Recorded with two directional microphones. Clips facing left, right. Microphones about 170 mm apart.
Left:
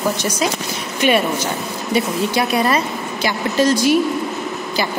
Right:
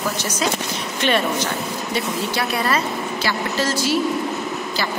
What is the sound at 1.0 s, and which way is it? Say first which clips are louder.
A woman's voice: left 4 dB; 10° left (ahead or behind).